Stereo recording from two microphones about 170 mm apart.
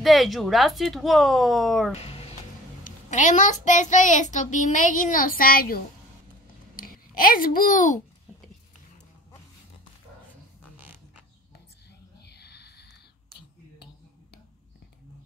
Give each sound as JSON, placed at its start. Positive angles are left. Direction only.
{"t": 0.0, "sound": "speech", "side_deg": 0}
{"t": 2.0, "sound": "music", "side_deg": 35}
{"t": 2.8, "sound": "child singing", "side_deg": 45}
{"t": 6.8, "sound": "a child's voice", "side_deg": 55}
{"t": 12.3, "sound": "a sound", "side_deg": 75}